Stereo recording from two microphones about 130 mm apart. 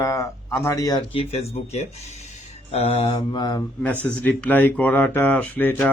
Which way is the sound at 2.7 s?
50° left (ahead or behind).